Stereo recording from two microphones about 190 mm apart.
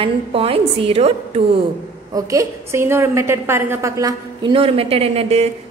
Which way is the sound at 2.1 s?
15° right (ahead or behind).